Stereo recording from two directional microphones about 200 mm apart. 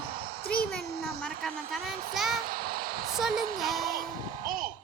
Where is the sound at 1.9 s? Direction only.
45° right (ahead or behind).